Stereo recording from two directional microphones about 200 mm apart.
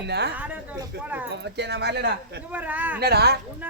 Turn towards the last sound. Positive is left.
turn(degrees=-55)  # may be behind; listen again after turning